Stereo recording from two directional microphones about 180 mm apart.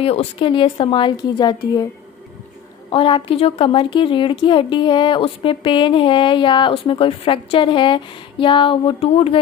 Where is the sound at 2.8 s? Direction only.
25° left (ahead or behind).